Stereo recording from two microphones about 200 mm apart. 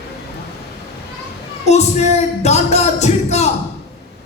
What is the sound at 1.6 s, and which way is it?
A man's voice, 35° left (ahead or behind).